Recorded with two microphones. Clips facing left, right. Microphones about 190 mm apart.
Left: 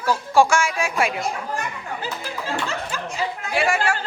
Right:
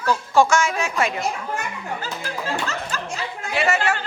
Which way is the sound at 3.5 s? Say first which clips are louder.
Right 1 dB; 10° left (ahead or behind).